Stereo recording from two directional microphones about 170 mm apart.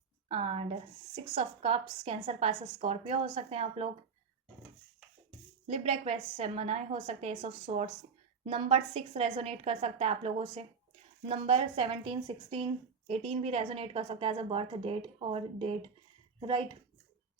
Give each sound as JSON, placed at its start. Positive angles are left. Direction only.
{"t": 0.3, "sound": "speech", "side_deg": -35}
{"t": 5.6, "sound": "speech", "side_deg": -35}